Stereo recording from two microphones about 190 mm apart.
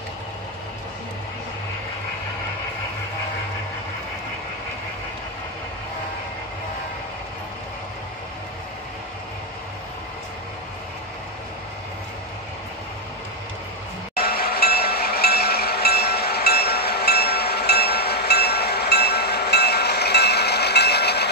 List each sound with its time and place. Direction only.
14.1 s train: 55° left (ahead or behind)